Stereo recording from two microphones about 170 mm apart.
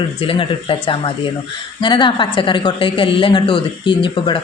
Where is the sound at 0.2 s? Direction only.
30° left (ahead or behind).